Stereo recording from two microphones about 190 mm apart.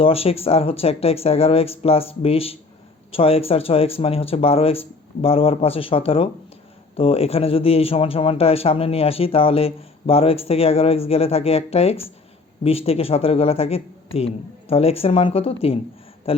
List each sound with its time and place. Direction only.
0.0 s speech: 30° left (ahead or behind)